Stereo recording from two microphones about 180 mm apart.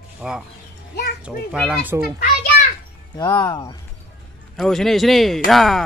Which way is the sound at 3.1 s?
20° left (ahead or behind).